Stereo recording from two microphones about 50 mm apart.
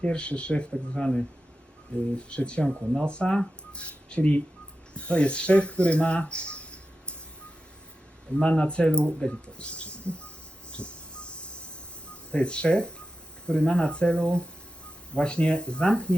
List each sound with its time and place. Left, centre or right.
0.0 s speech: left
2.6 s speech: centre
3.1 s speech: centre
8.4 s speech: left
9.1 s a sound: centre
12.0 s speech: left